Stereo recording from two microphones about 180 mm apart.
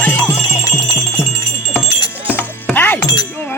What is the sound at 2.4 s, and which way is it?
Music, 10° left (ahead or behind).